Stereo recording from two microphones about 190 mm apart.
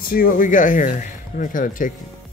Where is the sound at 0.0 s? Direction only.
50° left (ahead or behind).